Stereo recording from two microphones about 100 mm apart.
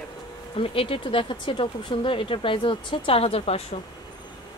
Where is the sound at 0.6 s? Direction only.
65° left (ahead or behind).